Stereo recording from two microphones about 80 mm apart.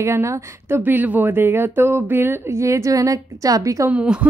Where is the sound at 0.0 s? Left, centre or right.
Right.